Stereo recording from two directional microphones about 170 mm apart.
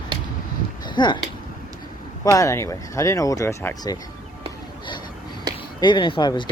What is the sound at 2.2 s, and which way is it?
Speech, 20° left (ahead or behind).